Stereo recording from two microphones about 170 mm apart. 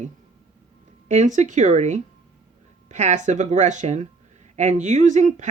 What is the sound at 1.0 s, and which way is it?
Speech, 45° right (ahead or behind).